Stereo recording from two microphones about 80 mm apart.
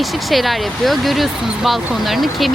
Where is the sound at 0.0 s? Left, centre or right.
Centre.